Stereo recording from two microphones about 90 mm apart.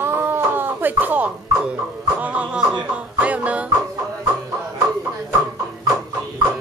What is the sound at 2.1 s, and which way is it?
Speech, 15° right (ahead or behind).